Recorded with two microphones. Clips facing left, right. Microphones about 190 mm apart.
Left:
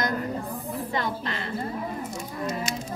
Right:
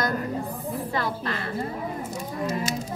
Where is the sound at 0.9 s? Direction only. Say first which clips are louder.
Even; 20° left (ahead or behind).